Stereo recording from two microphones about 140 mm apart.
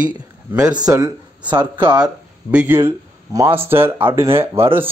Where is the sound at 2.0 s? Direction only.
10° right (ahead or behind).